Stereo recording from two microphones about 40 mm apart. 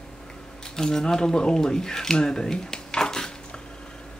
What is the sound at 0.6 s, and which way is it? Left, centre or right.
Speech, centre.